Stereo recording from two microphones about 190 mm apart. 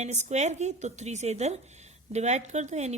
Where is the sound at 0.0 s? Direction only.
35° right (ahead or behind).